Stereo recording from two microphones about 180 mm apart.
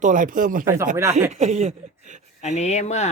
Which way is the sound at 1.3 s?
35° right (ahead or behind).